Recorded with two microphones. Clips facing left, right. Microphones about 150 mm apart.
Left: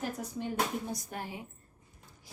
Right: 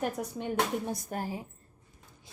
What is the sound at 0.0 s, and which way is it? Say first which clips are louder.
Speech: right 3 dB; 60° right (ahead or behind).